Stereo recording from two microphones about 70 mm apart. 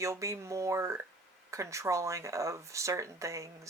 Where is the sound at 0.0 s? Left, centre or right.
Right.